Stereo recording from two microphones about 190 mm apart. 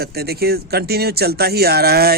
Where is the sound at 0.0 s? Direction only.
55° right (ahead or behind).